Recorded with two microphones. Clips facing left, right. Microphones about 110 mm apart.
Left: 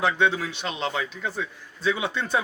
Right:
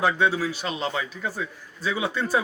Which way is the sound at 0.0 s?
10° right (ahead or behind).